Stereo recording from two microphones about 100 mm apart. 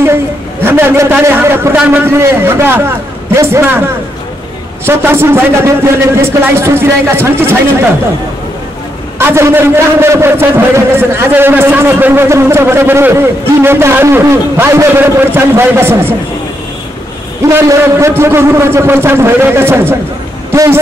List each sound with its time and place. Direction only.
0.7 s a man's voice: 20° right (ahead or behind)
4.8 s a man's voice: 25° right (ahead or behind)
9.2 s a man's voice: 25° right (ahead or behind)
17.5 s a man's voice: 25° right (ahead or behind)